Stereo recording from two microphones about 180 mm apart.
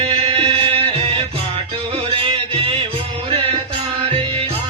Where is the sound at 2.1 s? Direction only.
30° right (ahead or behind).